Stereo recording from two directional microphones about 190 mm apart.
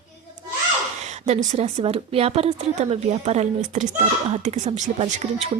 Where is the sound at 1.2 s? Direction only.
35° right (ahead or behind).